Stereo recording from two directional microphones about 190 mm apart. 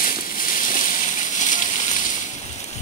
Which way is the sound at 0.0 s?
45° left (ahead or behind).